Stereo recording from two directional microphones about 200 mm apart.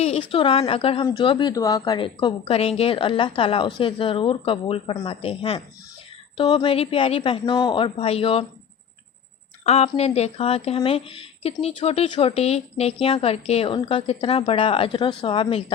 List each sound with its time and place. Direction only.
0.0 s a woman's voice: 30° left (ahead or behind)
9.6 s a woman's voice: 30° left (ahead or behind)